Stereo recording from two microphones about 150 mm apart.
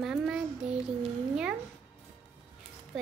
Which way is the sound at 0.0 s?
5° right (ahead or behind).